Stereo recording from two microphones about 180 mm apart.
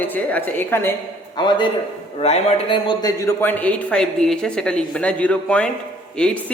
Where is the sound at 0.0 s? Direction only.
10° left (ahead or behind).